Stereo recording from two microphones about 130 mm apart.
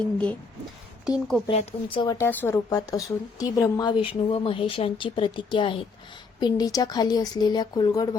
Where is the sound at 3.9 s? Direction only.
45° left (ahead or behind).